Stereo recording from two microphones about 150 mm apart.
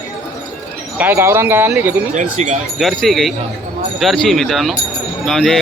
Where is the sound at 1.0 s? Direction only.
15° right (ahead or behind).